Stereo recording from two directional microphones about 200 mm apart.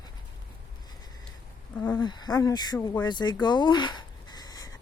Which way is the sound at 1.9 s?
20° left (ahead or behind).